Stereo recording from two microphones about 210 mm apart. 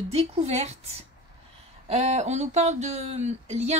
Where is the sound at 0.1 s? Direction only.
30° right (ahead or behind).